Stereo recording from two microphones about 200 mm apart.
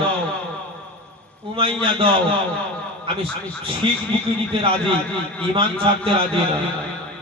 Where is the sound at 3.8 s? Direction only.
25° right (ahead or behind).